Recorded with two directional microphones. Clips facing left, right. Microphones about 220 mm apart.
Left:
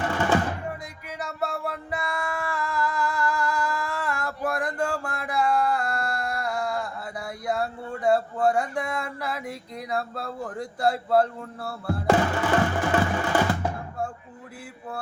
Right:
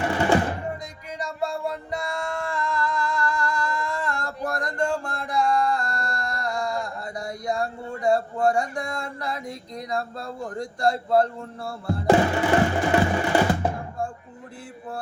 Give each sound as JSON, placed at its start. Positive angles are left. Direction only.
{"t": 0.1, "sound": "music", "side_deg": -15}
{"t": 1.2, "sound": "male singing", "side_deg": 5}
{"t": 4.4, "sound": "a sound", "side_deg": 5}
{"t": 12.0, "sound": "music", "side_deg": -20}